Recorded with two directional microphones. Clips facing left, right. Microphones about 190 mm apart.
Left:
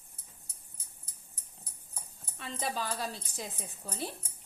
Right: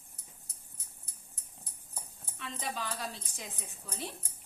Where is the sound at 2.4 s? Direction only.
35° left (ahead or behind).